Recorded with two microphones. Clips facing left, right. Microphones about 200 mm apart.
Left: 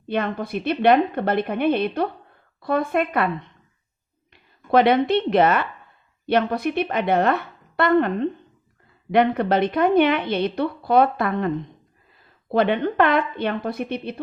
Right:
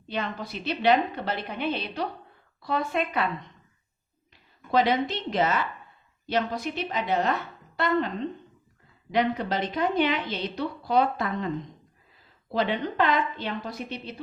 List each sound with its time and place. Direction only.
0.1 s a woman's voice: 55° left (ahead or behind)
4.3 s a woman's voice: 60° left (ahead or behind)